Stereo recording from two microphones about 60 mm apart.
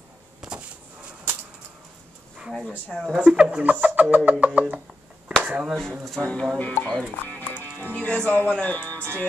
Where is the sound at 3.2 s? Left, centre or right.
Centre.